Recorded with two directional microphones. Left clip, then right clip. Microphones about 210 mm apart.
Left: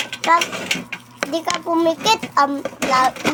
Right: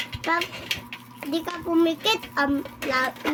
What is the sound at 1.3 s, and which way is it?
A child's voice, 25° right (ahead or behind).